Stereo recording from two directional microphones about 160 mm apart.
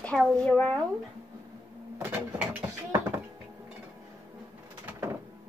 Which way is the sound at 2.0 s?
10° right (ahead or behind).